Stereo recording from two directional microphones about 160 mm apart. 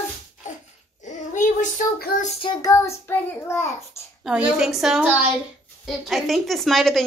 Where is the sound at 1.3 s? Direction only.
50° left (ahead or behind).